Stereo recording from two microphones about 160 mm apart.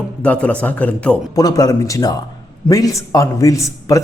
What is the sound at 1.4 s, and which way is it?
A man's voice, 25° left (ahead or behind).